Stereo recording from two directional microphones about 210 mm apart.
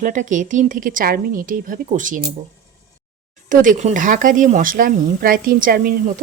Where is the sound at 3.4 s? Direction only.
40° right (ahead or behind).